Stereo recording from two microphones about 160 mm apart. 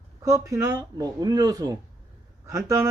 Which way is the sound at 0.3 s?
20° right (ahead or behind).